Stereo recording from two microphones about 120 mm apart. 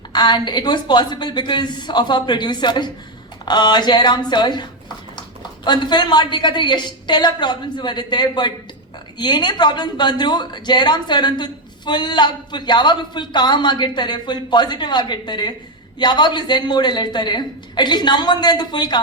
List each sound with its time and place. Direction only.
0.1 s speech: 40° left (ahead or behind)